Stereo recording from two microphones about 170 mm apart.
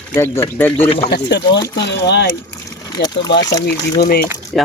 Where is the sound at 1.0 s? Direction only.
80° left.